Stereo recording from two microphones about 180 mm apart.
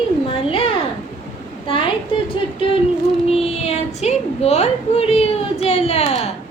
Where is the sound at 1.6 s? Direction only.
30° left (ahead or behind).